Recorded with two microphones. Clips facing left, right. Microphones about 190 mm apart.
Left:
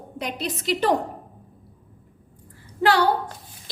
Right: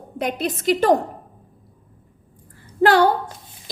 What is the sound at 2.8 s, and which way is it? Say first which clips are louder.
Speech: right 5 dB; 50° right (ahead or behind).